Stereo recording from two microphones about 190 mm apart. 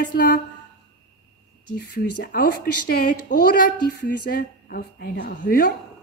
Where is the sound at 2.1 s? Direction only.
50° left (ahead or behind).